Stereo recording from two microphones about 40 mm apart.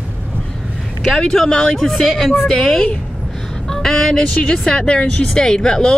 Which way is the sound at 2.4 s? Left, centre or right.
Centre.